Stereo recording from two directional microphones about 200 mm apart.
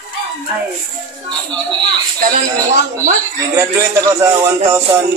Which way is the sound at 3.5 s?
15° right (ahead or behind).